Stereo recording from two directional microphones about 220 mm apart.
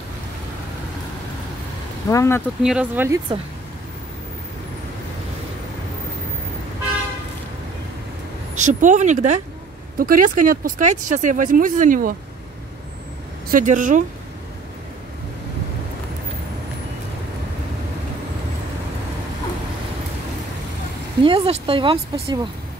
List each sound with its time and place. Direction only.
2.0 s speech: 15° left (ahead or behind)
2.6 s speech: 5° right (ahead or behind)
8.5 s speech: 35° right (ahead or behind)
13.5 s speech: 35° right (ahead or behind)
21.2 s speech: 25° right (ahead or behind)